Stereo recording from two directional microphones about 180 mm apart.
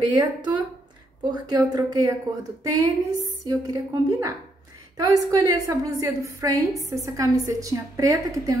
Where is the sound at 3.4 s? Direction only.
20° right (ahead or behind).